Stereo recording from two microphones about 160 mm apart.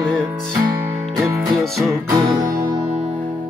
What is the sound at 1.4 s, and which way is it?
Music, centre (ahead or behind).